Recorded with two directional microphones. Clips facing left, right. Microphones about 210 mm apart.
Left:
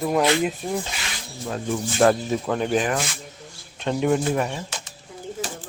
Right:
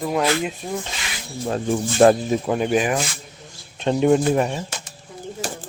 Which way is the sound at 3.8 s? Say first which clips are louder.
Right 4 dB; 25° right (ahead or behind).